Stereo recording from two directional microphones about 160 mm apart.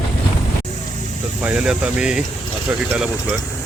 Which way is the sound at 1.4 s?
5° right (ahead or behind).